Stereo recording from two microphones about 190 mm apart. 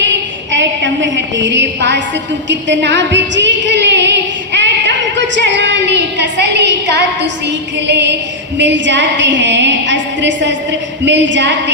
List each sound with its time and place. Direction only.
0.5 s a woman's voice: 70° right (ahead or behind)
2.5 s a sound: 70° right (ahead or behind)
8.5 s a woman's voice: 70° right (ahead or behind)